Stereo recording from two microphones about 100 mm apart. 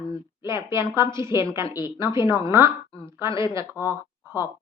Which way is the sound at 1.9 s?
30° right (ahead or behind).